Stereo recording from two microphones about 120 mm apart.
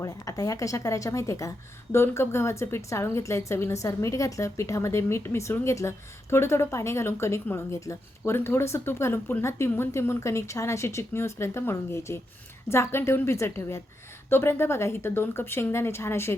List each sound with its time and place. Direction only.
0.0 s a woman's voice: 30° left (ahead or behind)